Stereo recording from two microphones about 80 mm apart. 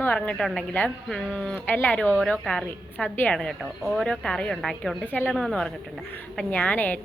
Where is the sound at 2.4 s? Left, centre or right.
Centre.